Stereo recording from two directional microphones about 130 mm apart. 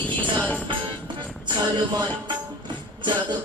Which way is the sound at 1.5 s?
35° right (ahead or behind).